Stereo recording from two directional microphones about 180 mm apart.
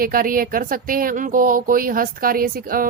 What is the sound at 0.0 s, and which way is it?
Speech, 50° right (ahead or behind).